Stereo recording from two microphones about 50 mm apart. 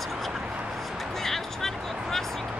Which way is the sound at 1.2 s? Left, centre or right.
Centre.